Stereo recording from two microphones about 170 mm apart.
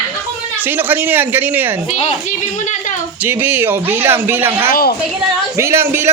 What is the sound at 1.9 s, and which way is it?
Speech, 40° left (ahead or behind).